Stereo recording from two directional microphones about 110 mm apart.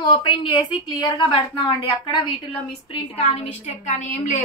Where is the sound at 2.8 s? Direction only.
60° left (ahead or behind).